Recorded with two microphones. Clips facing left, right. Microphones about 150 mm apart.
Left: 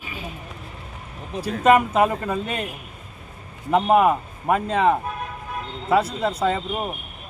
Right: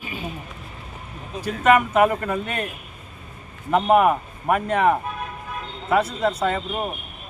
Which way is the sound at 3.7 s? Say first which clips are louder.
Even; 20° left (ahead or behind).